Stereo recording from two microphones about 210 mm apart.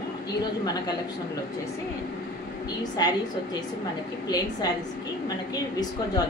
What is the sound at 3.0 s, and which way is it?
Speech, 20° left (ahead or behind).